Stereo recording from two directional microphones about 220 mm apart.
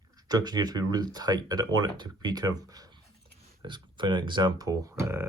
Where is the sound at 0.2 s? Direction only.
20° right (ahead or behind).